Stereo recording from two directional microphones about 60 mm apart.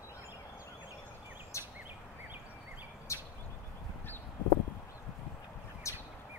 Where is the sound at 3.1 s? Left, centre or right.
Left.